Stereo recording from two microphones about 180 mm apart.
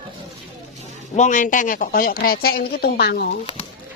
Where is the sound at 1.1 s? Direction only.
45° left (ahead or behind); by 3.3 s 65° left (ahead or behind).